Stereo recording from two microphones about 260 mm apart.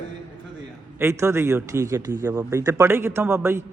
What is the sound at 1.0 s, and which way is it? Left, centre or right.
A man's voice, centre.